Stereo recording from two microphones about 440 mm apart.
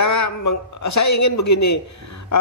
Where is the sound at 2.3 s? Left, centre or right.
Left.